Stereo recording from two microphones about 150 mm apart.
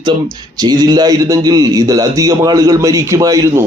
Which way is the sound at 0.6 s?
25° right (ahead or behind).